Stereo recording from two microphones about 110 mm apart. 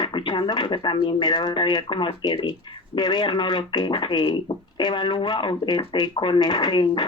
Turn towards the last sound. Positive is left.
turn(degrees=45)  # may be behind; listen again after turning